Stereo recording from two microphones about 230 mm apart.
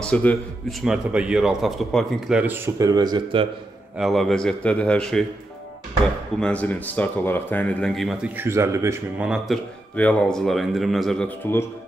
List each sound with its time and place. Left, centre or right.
0.0 s speech: centre; by 3.4 s right
4.0 s speech: centre
6.4 s speech: centre
8.4 s speech: centre